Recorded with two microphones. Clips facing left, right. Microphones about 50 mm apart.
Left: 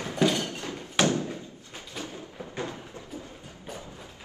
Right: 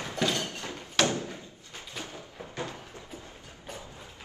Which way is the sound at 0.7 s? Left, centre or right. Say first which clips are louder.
Left 2 dB; left.